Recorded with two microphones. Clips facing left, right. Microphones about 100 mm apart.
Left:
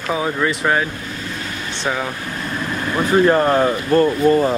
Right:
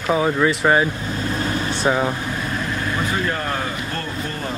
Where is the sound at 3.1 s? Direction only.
45° left (ahead or behind).